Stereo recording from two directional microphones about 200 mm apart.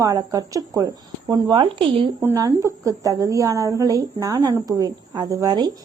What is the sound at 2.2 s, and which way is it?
A woman's voice, 15° right (ahead or behind).